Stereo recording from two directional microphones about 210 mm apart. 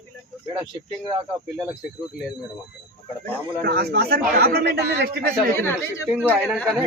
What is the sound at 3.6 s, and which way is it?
Speech, 50° right (ahead or behind).